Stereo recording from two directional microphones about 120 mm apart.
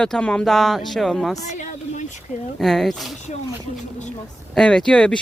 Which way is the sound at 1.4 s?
85° left.